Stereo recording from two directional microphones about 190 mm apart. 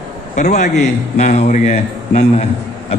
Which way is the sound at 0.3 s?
40° left (ahead or behind).